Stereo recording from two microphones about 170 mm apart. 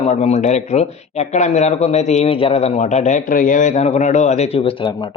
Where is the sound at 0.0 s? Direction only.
40° left (ahead or behind).